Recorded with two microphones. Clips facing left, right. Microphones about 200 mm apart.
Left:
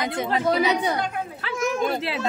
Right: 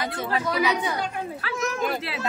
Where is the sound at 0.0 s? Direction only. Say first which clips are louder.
Left 3 dB; 20° left (ahead or behind).